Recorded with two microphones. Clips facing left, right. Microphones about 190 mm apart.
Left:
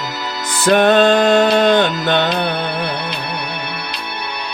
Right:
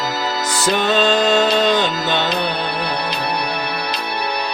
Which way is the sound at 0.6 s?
60° left (ahead or behind).